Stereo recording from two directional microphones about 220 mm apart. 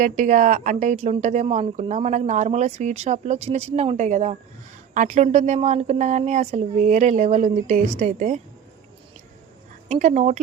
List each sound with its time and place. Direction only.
0.0 s speech: 35° right (ahead or behind)
9.9 s speech: 35° right (ahead or behind)